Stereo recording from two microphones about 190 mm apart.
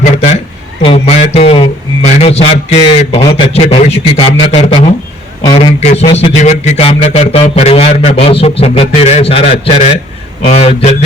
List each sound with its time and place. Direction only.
0.0 s speech: 35° left (ahead or behind)